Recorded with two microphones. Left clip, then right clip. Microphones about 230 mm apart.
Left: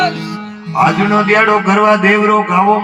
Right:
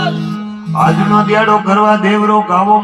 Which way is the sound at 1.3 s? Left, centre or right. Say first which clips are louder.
Left 2 dB; left.